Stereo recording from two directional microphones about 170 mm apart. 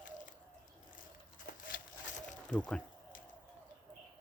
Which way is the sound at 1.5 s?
60° left (ahead or behind).